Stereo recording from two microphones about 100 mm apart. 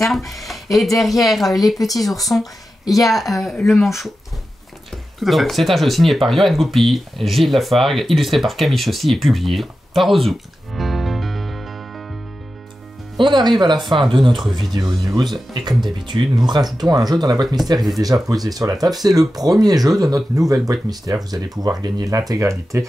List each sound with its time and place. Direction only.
0.0 s speech: centre (ahead or behind)
5.2 s speech: centre (ahead or behind)
13.2 s speech: 45° right (ahead or behind)
14.4 s speech: centre (ahead or behind)
14.7 s speech: 40° right (ahead or behind)
17.7 s speech: centre (ahead or behind)
18.0 s speech: 35° right (ahead or behind)